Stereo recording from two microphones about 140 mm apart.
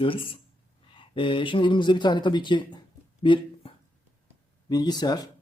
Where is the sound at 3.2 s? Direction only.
35° left (ahead or behind).